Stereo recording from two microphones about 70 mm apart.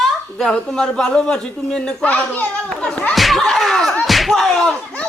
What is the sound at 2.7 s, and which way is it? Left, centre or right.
Children playing, centre.